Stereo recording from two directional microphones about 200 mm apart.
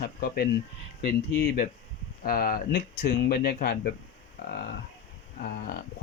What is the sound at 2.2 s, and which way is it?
Speech, 45° left (ahead or behind).